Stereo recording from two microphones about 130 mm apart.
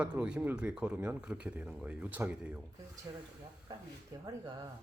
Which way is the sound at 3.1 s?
30° right (ahead or behind).